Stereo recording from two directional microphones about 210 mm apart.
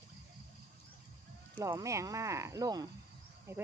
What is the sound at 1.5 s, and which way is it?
Speech, 15° right (ahead or behind).